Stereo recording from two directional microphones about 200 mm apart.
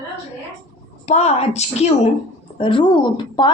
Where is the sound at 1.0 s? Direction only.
35° left (ahead or behind).